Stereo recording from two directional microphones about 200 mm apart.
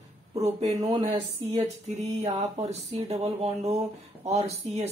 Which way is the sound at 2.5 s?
30° right (ahead or behind).